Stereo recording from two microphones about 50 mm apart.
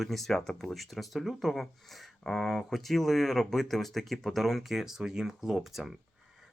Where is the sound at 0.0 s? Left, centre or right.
Centre.